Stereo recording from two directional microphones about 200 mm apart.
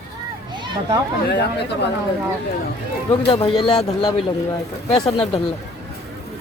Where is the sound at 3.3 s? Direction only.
30° left (ahead or behind).